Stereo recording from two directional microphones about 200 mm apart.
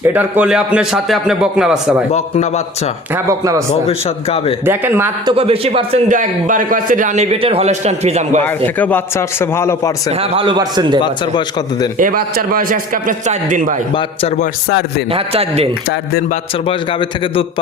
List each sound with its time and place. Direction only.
0.0 s a man's voice: 10° right (ahead or behind)
2.1 s a man's voice: 35° left (ahead or behind)
3.2 s a man's voice: 15° right (ahead or behind)
3.7 s a man's voice: 30° left (ahead or behind)
4.6 s a man's voice: 10° right (ahead or behind)
5.2 s a man's voice: 30° right (ahead or behind)
8.4 s a man's voice: 10° left (ahead or behind)
10.1 s a man's voice: 30° right (ahead or behind)
11.0 s a man's voice: 20° left (ahead or behind)
11.9 s a man's voice: 45° right (ahead or behind)
13.9 s a man's voice: 30° left (ahead or behind)
14.7 s a man's voice: 55° left (ahead or behind)
15.1 s a man's voice: 30° right (ahead or behind)
16.3 s a man's voice: 25° left (ahead or behind)